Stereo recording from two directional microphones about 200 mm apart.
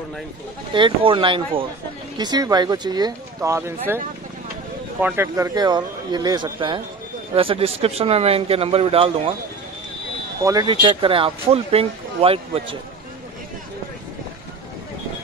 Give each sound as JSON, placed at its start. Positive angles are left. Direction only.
{"t": 0.7, "sound": "speech", "side_deg": -25}
{"t": 5.0, "sound": "speech", "side_deg": -10}
{"t": 10.4, "sound": "speech", "side_deg": -20}